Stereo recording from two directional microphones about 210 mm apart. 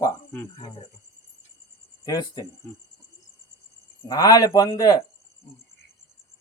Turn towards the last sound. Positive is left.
turn(degrees=15)  # may be behind; listen again after turning